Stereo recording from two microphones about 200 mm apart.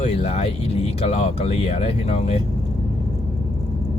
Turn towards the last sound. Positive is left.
turn(degrees=30)  # may be behind; listen again after turning